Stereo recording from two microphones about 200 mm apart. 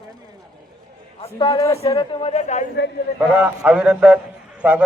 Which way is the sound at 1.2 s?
25° left (ahead or behind).